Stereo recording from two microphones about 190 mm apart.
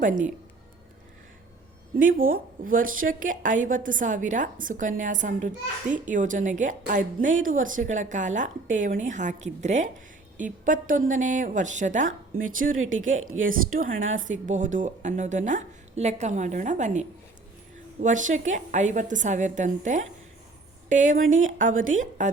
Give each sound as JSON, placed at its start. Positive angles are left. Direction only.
{"t": 2.0, "sound": "a woman's voice", "side_deg": -45}
{"t": 12.7, "sound": "a woman's voice", "side_deg": -90}
{"t": 13.7, "sound": "a woman's voice", "side_deg": -45}